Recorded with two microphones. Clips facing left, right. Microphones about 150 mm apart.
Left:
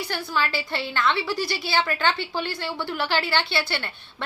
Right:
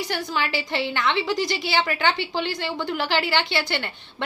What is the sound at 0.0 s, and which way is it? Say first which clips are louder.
A woman's voice: right 1 dB; 15° right (ahead or behind).